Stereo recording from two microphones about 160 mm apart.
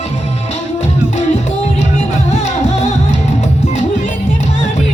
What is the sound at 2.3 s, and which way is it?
Music, 45° left (ahead or behind).